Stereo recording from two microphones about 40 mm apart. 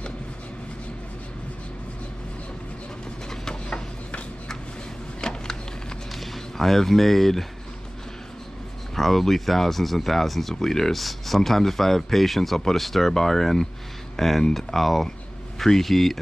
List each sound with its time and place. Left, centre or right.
5.2 s a sound: centre
6.1 s speech: centre
8.9 s speech: centre